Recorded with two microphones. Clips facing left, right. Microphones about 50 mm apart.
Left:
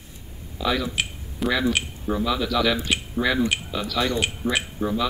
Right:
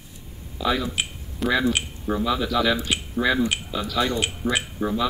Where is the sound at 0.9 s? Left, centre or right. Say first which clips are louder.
Left 1 dB; centre.